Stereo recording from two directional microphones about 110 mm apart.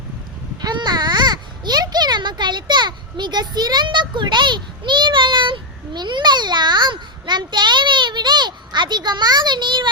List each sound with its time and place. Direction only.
0.6 s a child's voice: 40° right (ahead or behind)